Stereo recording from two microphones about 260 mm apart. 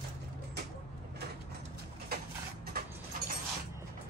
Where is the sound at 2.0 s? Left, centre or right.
Right.